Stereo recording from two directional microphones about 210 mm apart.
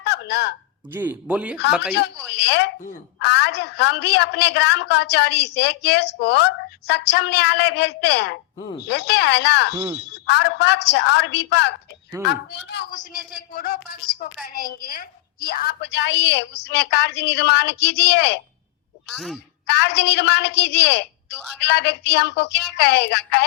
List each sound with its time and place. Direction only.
0.0 s a sound: 55° left (ahead or behind)
0.9 s speech: 10° right (ahead or behind)
2.3 s a woman's voice: 55° left (ahead or behind)
9.7 s speech: 10° right (ahead or behind)
10.1 s a woman's voice: 55° left (ahead or behind)
19.1 s speech: centre (ahead or behind)
19.6 s a woman's voice: 55° left (ahead or behind)